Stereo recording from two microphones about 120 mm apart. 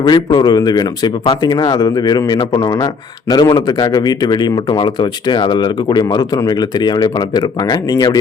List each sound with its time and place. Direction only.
0.0 s speech: 35° left (ahead or behind)